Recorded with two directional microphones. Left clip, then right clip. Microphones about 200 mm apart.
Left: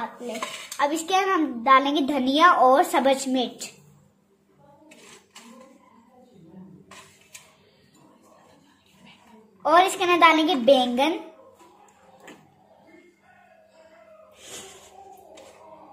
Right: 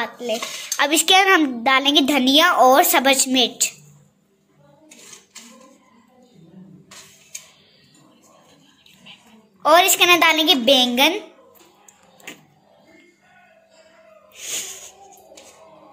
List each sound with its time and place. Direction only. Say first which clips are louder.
0.7 s a woman's voice: right 8 dB; 20° right (ahead or behind)
9.6 s a woman's voice: right 5 dB; 15° right (ahead or behind)